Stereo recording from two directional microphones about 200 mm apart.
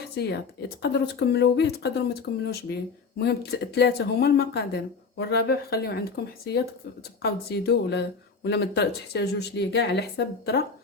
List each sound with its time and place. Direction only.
0.8 s speech: 55° left (ahead or behind)